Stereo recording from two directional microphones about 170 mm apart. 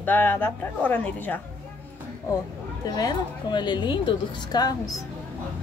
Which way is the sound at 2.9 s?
20° left (ahead or behind).